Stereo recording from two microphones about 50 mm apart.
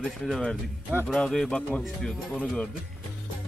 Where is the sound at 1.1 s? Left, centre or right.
Centre.